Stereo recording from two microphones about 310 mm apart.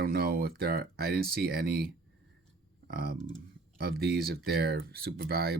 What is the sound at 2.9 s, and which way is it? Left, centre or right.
Speech, right.